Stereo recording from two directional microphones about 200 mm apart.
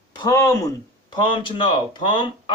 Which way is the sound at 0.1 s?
20° left (ahead or behind).